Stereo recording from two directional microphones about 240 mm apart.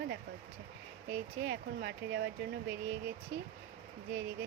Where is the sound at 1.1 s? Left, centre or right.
Right.